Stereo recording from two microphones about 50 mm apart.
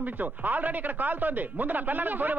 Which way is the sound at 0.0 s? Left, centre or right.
Right.